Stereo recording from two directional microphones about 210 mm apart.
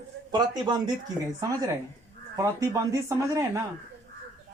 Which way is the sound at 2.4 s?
15° right (ahead or behind).